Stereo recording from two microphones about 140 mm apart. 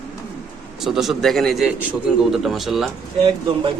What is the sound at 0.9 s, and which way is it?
Speech, centre (ahead or behind).